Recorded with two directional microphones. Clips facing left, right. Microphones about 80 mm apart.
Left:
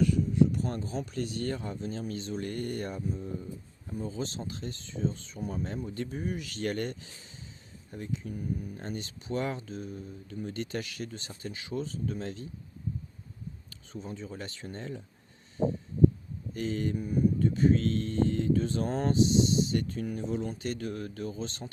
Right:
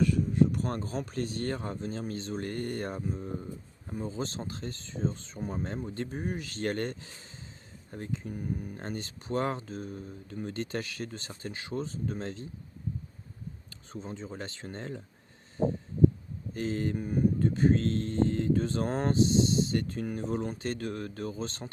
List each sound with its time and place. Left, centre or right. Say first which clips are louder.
0.0 s speech: even; right
13.7 s speech: even; right
16.6 s speech: even; right